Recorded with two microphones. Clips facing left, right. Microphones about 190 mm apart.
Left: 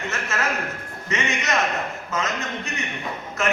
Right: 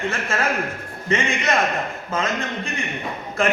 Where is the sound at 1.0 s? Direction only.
30° right (ahead or behind).